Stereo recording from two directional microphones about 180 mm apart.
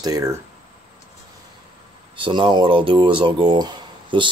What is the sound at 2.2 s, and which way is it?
Speech, 25° right (ahead or behind).